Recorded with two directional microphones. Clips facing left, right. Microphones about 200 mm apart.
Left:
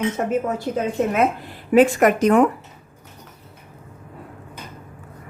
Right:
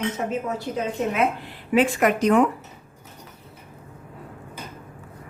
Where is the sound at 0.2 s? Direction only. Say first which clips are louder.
Left 5 dB; 55° left (ahead or behind).